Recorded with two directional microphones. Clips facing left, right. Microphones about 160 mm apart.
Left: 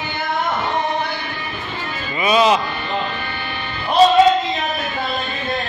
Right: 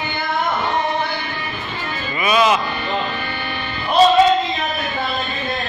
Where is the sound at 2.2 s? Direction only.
30° left (ahead or behind).